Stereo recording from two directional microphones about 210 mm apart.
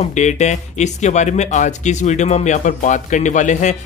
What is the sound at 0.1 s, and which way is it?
Speech, 35° left (ahead or behind).